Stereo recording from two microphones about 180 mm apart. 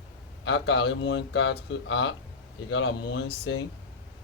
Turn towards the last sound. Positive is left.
turn(degrees=75)  # may be behind; listen again after turning